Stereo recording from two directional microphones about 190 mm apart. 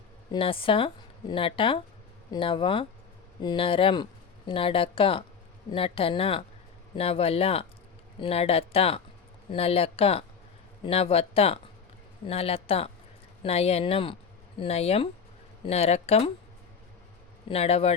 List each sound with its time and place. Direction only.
0.3 s speech: 30° left (ahead or behind)
17.5 s speech: 30° left (ahead or behind)